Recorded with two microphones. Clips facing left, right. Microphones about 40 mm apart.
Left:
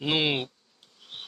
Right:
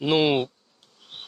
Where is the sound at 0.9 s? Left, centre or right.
Centre.